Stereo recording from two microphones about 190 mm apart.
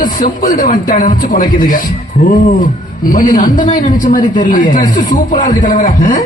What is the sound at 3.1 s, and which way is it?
A man's voice, 45° left (ahead or behind).